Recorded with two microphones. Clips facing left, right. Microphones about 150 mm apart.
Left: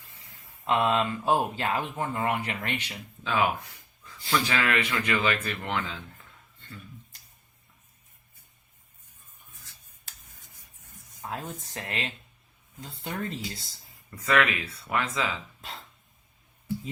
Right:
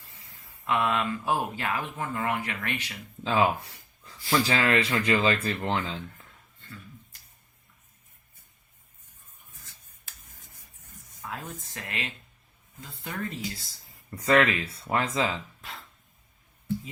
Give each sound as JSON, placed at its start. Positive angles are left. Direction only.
{"t": 0.6, "sound": "speech", "side_deg": 25}
{"t": 3.2, "sound": "speech", "side_deg": -30}
{"t": 11.2, "sound": "speech", "side_deg": 25}
{"t": 14.2, "sound": "speech", "side_deg": -30}